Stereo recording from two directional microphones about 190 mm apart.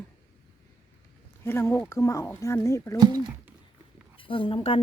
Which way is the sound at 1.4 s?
10° left (ahead or behind).